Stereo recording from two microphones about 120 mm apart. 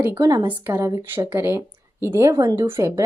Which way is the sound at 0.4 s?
20° right (ahead or behind).